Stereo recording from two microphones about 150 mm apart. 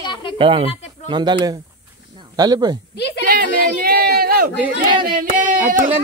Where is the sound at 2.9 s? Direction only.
90° left.